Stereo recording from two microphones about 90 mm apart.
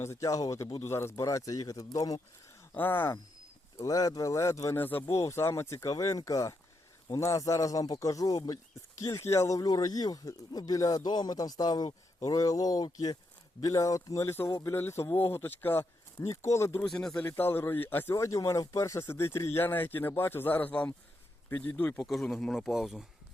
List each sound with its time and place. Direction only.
0.0 s speech: 35° left (ahead or behind)
2.7 s speech: 20° left (ahead or behind)
3.8 s speech: 40° left (ahead or behind)
4.8 s speech: 20° left (ahead or behind)
5.1 s speech: 35° left (ahead or behind)
9.1 s speech: 30° left (ahead or behind)
16.8 s speech: 5° left (ahead or behind)
17.2 s speech: 20° left (ahead or behind)
18.1 s speech: 35° left (ahead or behind); by 22.0 s 20° left (ahead or behind)
22.0 s speech: centre (ahead or behind)